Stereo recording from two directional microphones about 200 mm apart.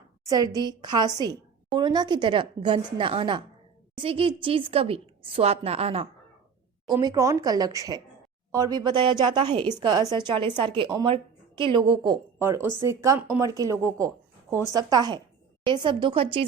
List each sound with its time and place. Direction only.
0.3 s a woman's voice: 20° right (ahead or behind)